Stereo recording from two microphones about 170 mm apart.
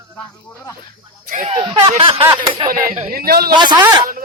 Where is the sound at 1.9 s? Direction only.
30° right (ahead or behind).